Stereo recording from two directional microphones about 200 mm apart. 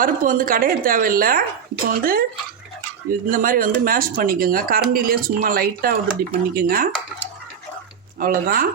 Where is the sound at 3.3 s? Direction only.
45° right (ahead or behind).